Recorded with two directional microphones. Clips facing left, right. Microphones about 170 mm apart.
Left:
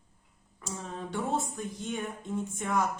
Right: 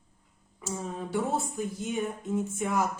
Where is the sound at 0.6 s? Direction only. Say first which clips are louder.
Right 4 dB; 5° right (ahead or behind).